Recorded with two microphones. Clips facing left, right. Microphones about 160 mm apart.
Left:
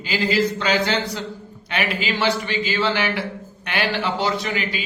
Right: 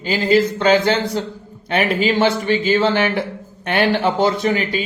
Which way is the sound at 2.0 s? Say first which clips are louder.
Right 6 dB; 50° right (ahead or behind).